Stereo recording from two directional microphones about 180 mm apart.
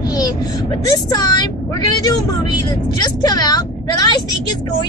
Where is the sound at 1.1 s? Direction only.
20° left (ahead or behind).